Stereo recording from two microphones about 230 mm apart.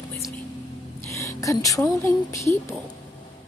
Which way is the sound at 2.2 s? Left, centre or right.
Centre.